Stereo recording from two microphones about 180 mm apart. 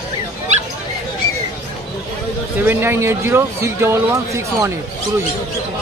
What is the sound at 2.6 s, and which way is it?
Speech, 10° right (ahead or behind).